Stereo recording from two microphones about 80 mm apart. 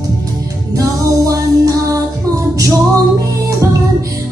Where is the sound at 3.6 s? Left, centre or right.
Right.